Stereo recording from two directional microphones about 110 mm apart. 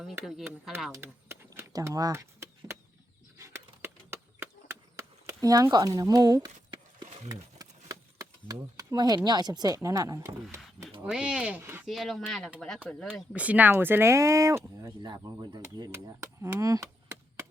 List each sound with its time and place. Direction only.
0.3 s speech: 5° right (ahead or behind)
1.0 s a sound: 20° right (ahead or behind)
1.7 s speech: 35° right (ahead or behind)
3.3 s a sound: 25° right (ahead or behind)
7.6 s speech: 35° right (ahead or behind)
11.0 s speech: 5° right (ahead or behind)
11.9 s speech: centre (ahead or behind)
13.3 s speech: 10° right (ahead or behind); by 17.4 s 25° right (ahead or behind)